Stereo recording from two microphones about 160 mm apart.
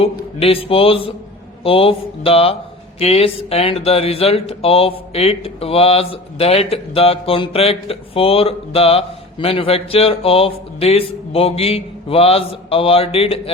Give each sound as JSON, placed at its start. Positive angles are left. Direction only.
{"t": 0.0, "sound": "speech", "side_deg": 35}